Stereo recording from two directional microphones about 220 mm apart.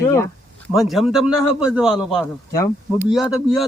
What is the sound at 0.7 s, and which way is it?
A man's voice, centre (ahead or behind).